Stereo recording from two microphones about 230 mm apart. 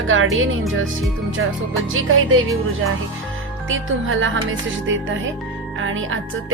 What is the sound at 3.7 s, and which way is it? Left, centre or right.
Music, right.